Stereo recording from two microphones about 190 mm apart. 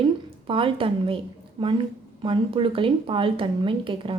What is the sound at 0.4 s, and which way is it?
Speech, 30° right (ahead or behind).